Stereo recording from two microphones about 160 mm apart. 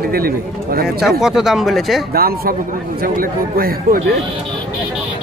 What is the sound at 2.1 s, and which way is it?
A man's voice, 70° right (ahead or behind).